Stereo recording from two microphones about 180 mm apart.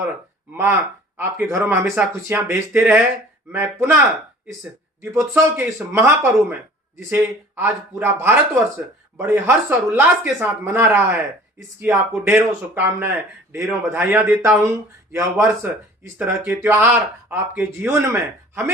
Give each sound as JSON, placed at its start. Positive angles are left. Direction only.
{"t": 1.1, "sound": "speech", "side_deg": -15}
{"t": 5.1, "sound": "speech", "side_deg": -15}
{"t": 7.1, "sound": "speech", "side_deg": -10}